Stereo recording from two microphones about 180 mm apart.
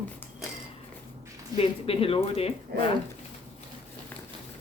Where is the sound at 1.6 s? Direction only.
30° left (ahead or behind).